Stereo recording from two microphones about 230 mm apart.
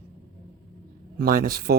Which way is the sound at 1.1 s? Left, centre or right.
Right.